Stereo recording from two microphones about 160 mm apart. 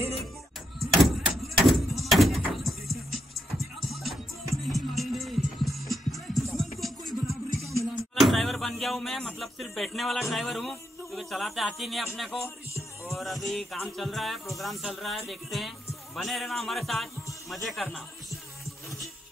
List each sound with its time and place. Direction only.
0.7 s door: centre (ahead or behind)
3.5 s music: centre (ahead or behind)
7.6 s speech: centre (ahead or behind)
13.1 s music: centre (ahead or behind)
17.5 s speech: centre (ahead or behind)